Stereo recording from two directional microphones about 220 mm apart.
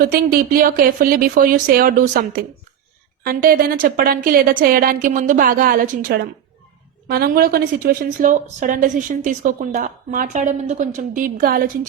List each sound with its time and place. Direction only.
0.0 s a woman's voice: 40° right (ahead or behind)